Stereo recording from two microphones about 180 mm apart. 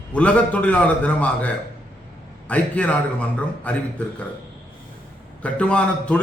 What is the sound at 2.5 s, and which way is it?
A man's voice, 10° left (ahead or behind).